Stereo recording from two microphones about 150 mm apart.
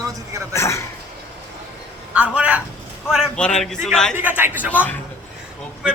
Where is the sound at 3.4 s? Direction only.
5° left (ahead or behind).